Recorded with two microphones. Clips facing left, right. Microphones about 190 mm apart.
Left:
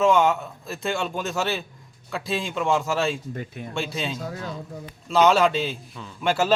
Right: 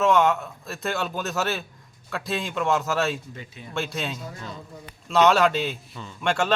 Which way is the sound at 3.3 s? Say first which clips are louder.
Left 7 dB; 55° left (ahead or behind).